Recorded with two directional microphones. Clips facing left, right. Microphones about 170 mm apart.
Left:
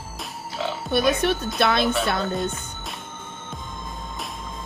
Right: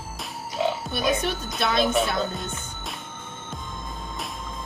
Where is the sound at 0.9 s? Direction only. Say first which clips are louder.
Left 4 dB; 65° left (ahead or behind).